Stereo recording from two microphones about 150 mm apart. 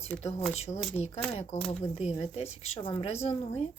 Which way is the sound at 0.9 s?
45° left (ahead or behind).